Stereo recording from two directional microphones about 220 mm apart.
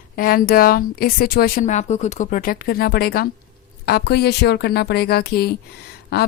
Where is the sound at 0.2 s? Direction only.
40° left (ahead or behind).